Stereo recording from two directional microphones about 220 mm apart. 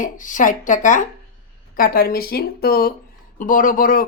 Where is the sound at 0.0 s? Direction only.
35° left (ahead or behind).